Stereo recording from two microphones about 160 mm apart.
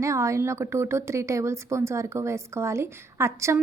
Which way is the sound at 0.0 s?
20° right (ahead or behind).